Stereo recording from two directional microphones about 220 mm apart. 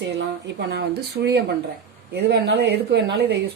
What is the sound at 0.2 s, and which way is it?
Speech, 50° right (ahead or behind).